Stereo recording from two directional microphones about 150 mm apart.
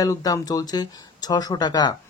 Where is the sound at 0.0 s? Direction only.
25° left (ahead or behind).